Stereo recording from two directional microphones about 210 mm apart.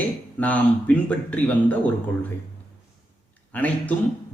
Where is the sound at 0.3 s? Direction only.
5° left (ahead or behind).